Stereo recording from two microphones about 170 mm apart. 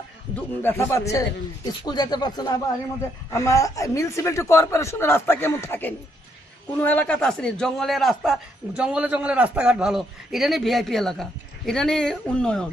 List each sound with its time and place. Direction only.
0.6 s a man's voice: 15° left (ahead or behind)